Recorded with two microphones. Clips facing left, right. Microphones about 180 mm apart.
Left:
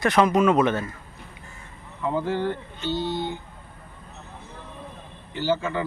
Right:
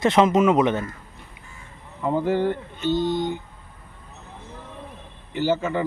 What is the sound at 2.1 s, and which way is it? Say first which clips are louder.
Speech: right 4 dB; 15° right (ahead or behind).